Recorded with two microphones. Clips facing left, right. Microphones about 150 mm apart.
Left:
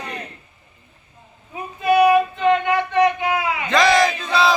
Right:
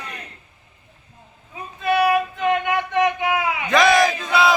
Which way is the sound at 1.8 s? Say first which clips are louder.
Left 4 dB; centre (ahead or behind).